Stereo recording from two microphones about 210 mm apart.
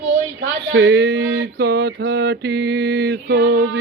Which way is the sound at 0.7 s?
55° right (ahead or behind).